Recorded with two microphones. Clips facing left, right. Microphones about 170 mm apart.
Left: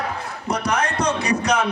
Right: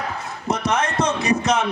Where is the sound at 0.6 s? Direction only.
25° right (ahead or behind).